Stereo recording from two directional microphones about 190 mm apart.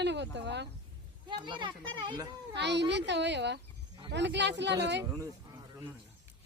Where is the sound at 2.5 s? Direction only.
65° right (ahead or behind).